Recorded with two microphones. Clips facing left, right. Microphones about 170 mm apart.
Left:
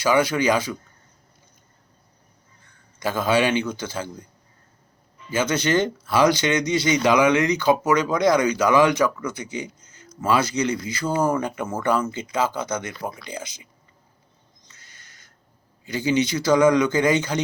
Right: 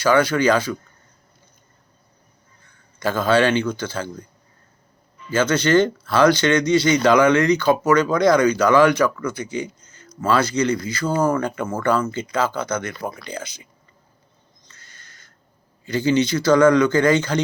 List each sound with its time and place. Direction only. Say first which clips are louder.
0.0 s speech: right 3 dB; 15° left (ahead or behind)
3.0 s speech: right 3 dB; 15° left (ahead or behind)
5.3 s speech: right 4 dB; 15° left (ahead or behind)
14.7 s owl: right 3 dB; 15° left (ahead or behind)
15.9 s speech: right 3 dB; 10° left (ahead or behind)